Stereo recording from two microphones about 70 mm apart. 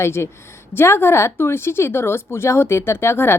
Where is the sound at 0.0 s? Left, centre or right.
Left.